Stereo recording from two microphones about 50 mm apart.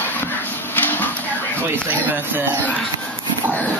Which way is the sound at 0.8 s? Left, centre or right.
Left.